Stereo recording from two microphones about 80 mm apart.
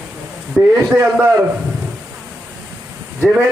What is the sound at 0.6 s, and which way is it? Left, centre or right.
Speech, centre.